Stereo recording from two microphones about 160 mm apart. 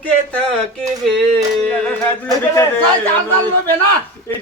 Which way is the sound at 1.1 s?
5° left (ahead or behind).